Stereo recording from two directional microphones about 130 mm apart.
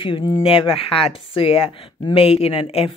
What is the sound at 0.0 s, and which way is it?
Speech, 40° left (ahead or behind).